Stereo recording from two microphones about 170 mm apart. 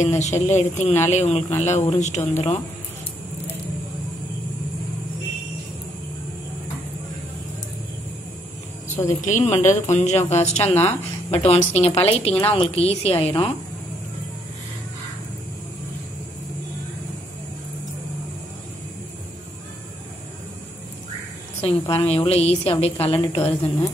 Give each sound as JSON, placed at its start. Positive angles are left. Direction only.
{"t": 0.0, "sound": "a woman's voice", "side_deg": 40}
{"t": 9.1, "sound": "a woman's voice", "side_deg": 40}
{"t": 21.5, "sound": "a woman's voice", "side_deg": 35}